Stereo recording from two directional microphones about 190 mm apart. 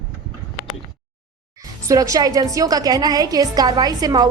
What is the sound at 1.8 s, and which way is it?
A woman's voice, 15° right (ahead or behind).